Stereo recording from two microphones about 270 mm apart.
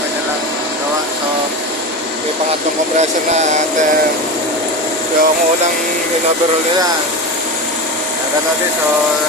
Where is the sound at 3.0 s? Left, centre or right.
Right.